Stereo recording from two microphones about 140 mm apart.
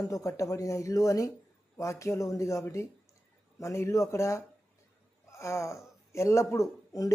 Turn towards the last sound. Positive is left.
turn(degrees=25)  # may be behind; listen again after turning